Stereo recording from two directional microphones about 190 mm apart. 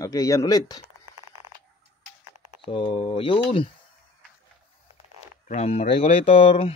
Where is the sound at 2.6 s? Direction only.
25° left (ahead or behind).